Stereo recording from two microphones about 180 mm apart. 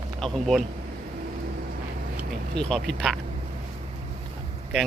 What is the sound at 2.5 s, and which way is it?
Speech, 5° left (ahead or behind).